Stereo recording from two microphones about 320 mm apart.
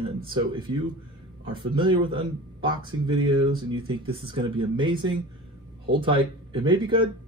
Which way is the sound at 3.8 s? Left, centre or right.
Centre.